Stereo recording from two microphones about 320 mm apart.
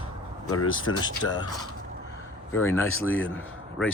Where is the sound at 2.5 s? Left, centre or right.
Centre.